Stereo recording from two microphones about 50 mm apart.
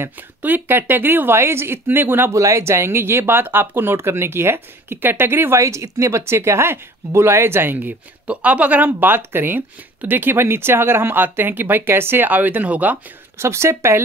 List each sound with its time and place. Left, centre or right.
0.4 s speech: right
2.3 s speech: right
5.6 s speech: right
8.3 s speech: right
12.3 s speech: right
13.4 s speech: right